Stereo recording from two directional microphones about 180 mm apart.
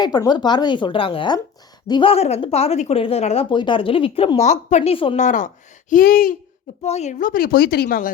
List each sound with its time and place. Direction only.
0.0 s speech: 20° left (ahead or behind)
5.2 s a woman's voice: 45° left (ahead or behind)
6.8 s a woman's voice: 35° left (ahead or behind); by 8.1 s 55° left (ahead or behind)